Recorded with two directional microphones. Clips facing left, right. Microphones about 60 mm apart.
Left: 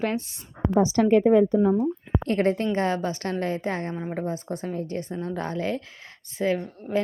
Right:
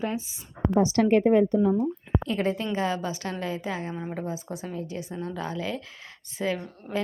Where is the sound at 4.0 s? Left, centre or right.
Centre.